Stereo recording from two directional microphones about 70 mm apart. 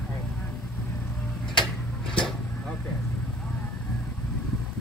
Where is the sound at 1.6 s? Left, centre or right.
Centre.